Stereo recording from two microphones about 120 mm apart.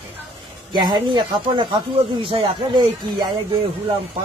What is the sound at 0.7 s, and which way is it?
Speech, 40° right (ahead or behind).